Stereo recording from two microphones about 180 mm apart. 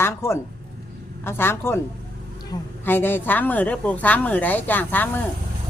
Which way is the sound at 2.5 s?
25° left (ahead or behind).